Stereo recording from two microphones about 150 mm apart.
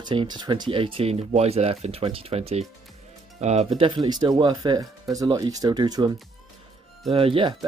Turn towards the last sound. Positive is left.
turn(degrees=-35)  # may be behind; listen again after turning